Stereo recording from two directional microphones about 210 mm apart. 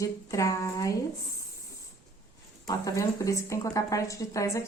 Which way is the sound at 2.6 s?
15° left (ahead or behind).